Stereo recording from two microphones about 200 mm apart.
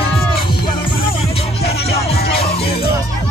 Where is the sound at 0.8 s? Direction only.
25° left (ahead or behind).